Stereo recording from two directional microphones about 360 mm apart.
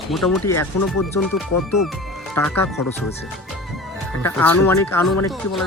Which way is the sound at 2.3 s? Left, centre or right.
Centre.